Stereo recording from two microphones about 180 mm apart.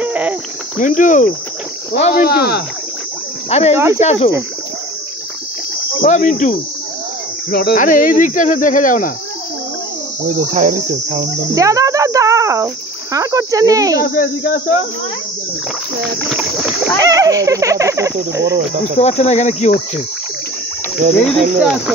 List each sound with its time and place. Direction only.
0.0 s cricket: 10° right (ahead or behind)
0.7 s speech: 45° left (ahead or behind)
3.4 s speech: 35° left (ahead or behind)
3.7 s speech: 15° right (ahead or behind)
4.0 s cricket: 40° left (ahead or behind)
6.0 s speech: 45° left (ahead or behind)
10.2 s cricket: 45° right (ahead or behind)
11.5 s cricket: 20° right (ahead or behind)
14.1 s speech: 50° left (ahead or behind)
16.0 s speech: centre (ahead or behind)
17.0 s speech: 20° right (ahead or behind)
18.9 s cricket: 40° left (ahead or behind)
21.5 s speech: 5° right (ahead or behind)